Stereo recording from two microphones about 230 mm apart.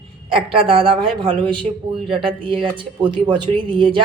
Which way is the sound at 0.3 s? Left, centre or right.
Right.